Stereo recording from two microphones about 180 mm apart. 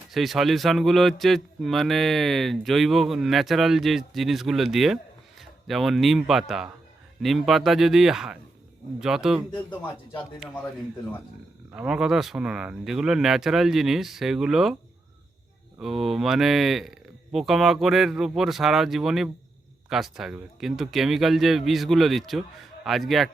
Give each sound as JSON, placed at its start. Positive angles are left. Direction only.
{"t": 0.1, "sound": "a man's voice", "side_deg": 0}
{"t": 9.5, "sound": "speech", "side_deg": 25}
{"t": 11.7, "sound": "a man's voice", "side_deg": -5}
{"t": 15.8, "sound": "a man's voice", "side_deg": 0}